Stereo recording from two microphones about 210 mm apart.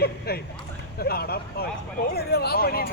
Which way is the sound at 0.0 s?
50° left (ahead or behind).